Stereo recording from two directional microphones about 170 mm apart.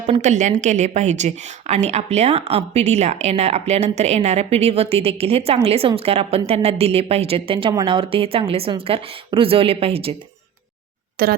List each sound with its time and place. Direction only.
0.1 s a woman's voice: 45° right (ahead or behind)
11.2 s speech: 60° right (ahead or behind)